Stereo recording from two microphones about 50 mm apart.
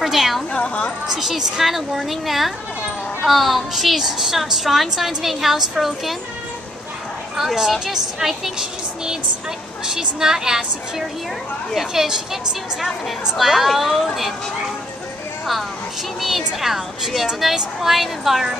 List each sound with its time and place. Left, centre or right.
0.0 s a woman's voice: centre
0.5 s a woman's voice: left
1.0 s a woman's voice: centre
7.3 s a woman's voice: centre
13.4 s a woman's voice: centre
16.2 s a woman's voice: centre